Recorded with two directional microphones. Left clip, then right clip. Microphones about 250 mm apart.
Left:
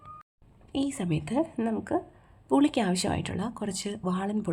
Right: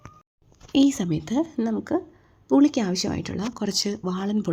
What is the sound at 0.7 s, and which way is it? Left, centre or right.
Speech, right.